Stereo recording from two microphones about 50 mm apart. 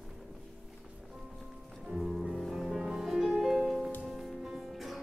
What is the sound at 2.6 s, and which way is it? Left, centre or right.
Music, centre.